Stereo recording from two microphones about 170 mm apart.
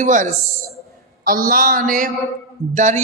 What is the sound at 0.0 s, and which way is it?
Speech, 45° right (ahead or behind).